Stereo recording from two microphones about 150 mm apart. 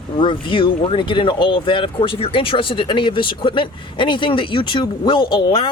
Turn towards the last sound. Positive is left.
turn(degrees=35)  # may be behind; listen again after turning